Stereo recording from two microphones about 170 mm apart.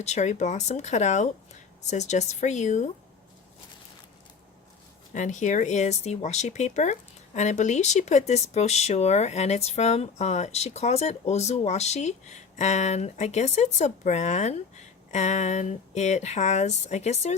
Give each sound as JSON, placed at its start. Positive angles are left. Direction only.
{"t": 0.0, "sound": "speech", "side_deg": 45}
{"t": 5.1, "sound": "speech", "side_deg": 45}